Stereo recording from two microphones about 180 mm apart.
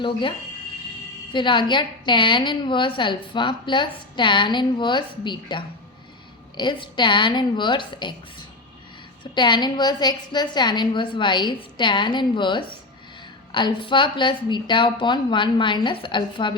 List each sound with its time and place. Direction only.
0.0 s a woman's voice: 30° left (ahead or behind)
9.2 s a woman's voice: 25° left (ahead or behind)